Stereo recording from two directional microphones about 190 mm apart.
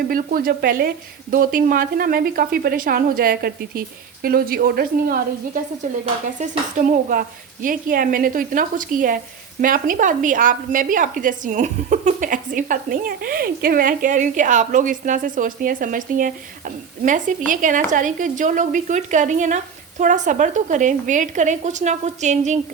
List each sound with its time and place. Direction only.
0.1 s a woman's voice: 45° right (ahead or behind)
6.4 s a woman's voice: 40° right (ahead or behind)